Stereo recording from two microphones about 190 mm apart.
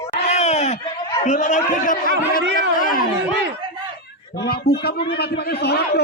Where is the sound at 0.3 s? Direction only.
35° left (ahead or behind).